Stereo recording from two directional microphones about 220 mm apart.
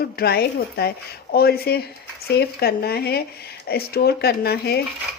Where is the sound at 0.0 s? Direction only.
45° left (ahead or behind).